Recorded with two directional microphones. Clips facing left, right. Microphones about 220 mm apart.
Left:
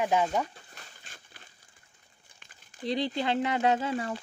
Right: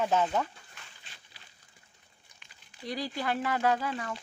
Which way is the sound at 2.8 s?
25° left (ahead or behind).